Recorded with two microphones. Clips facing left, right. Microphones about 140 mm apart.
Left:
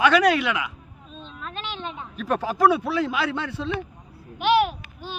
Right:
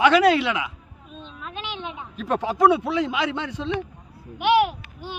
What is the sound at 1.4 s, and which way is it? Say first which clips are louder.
A man's voice: even; 15° right (ahead or behind).